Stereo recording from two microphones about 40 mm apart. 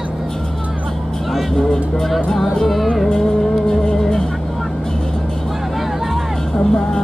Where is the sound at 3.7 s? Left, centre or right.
Centre.